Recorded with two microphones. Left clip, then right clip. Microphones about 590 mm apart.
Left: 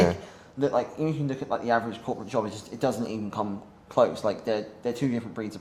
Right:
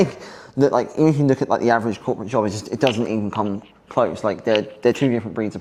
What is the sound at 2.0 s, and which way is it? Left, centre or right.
A man's voice, right.